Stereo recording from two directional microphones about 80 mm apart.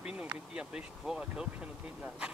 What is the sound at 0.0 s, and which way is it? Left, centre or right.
Speech, centre.